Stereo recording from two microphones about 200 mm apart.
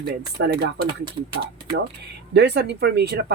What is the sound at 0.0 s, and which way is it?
Speech, 55° right (ahead or behind).